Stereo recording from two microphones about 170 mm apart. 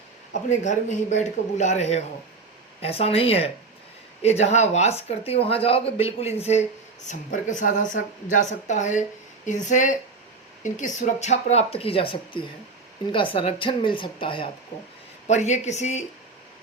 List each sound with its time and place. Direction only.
0.6 s a man's voice: 45° left (ahead or behind)
15.3 s a man's voice: 40° left (ahead or behind)